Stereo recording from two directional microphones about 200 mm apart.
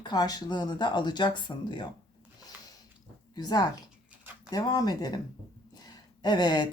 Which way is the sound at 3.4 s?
20° left (ahead or behind).